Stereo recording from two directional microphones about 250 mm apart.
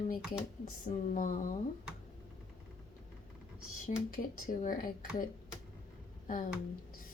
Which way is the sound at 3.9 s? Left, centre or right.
Left.